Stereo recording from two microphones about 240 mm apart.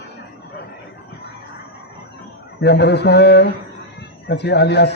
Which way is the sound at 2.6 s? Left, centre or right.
Left.